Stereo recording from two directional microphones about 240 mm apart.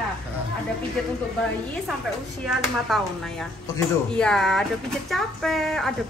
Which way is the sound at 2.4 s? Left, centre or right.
Centre.